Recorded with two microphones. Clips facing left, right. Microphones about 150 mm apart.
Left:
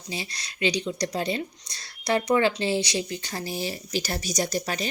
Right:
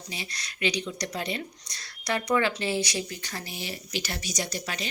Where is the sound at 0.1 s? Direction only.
30° left (ahead or behind).